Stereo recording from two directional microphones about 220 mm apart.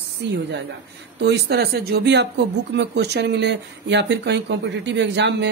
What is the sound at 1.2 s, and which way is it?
Speech, 50° right (ahead or behind).